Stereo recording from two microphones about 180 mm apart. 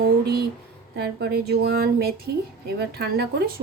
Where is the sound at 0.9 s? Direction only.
65° right (ahead or behind).